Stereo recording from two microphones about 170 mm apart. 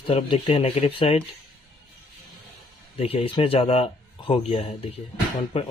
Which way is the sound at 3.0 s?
35° left (ahead or behind).